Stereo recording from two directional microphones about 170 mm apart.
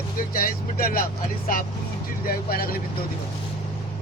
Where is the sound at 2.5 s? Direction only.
60° left (ahead or behind).